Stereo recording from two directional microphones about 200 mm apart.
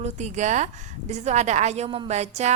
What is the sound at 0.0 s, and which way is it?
A woman's voice, 35° right (ahead or behind).